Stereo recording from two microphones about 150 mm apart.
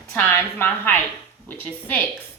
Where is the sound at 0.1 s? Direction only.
10° left (ahead or behind).